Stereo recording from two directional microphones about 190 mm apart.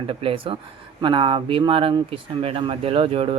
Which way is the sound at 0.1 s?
30° right (ahead or behind).